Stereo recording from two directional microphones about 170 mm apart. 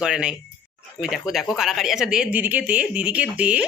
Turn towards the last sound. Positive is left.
turn(degrees=-5)  # may be behind; listen again after turning